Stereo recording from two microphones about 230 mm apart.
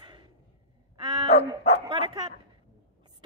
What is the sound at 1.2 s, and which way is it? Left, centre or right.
Dog, left.